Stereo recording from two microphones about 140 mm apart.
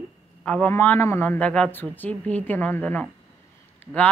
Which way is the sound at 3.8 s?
15° left (ahead or behind).